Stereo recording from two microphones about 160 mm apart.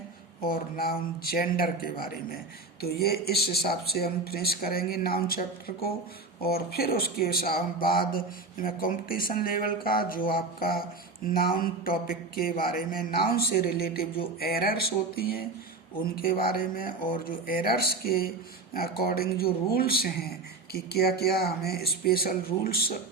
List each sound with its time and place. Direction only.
0.4 s speech: 65° left (ahead or behind)
2.8 s speech: 80° left